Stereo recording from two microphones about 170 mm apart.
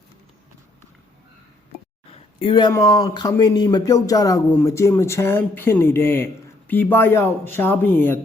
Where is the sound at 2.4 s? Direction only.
25° left (ahead or behind).